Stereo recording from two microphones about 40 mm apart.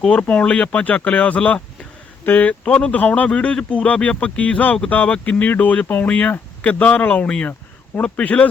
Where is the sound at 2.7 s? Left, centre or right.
Left.